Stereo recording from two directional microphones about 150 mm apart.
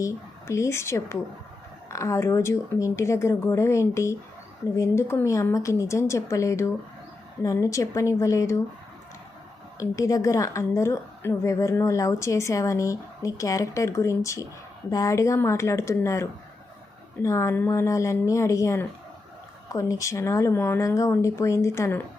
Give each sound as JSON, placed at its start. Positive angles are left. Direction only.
{"t": 0.0, "sound": "a woman's voice", "side_deg": 20}
{"t": 9.7, "sound": "a woman's voice", "side_deg": 20}
{"t": 17.2, "sound": "a woman's voice", "side_deg": 20}